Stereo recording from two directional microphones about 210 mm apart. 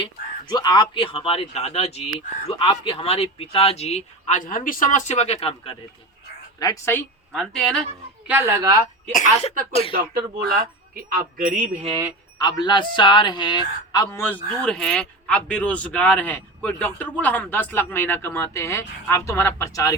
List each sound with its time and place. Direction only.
0.0 s speech: 20° left (ahead or behind)
6.6 s a man's voice: 15° left (ahead or behind)
8.3 s a woman's voice: 10° right (ahead or behind)
9.1 s speech: 35° left (ahead or behind)
10.5 s speech: 45° right (ahead or behind)
12.4 s a man's voice: 20° left (ahead or behind)